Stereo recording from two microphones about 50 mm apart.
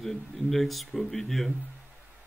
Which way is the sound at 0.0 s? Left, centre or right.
Centre.